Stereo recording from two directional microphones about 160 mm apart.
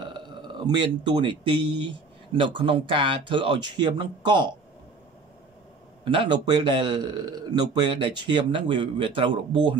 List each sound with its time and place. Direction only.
0.0 s speech: 30° right (ahead or behind)
6.0 s a man's voice: 30° right (ahead or behind)